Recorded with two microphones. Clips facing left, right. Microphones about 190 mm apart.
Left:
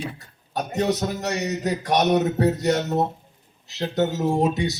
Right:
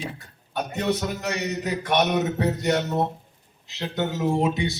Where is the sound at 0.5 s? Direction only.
40° left (ahead or behind).